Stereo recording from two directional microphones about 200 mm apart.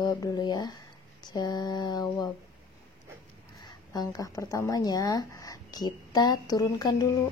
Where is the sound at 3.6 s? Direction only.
20° left (ahead or behind).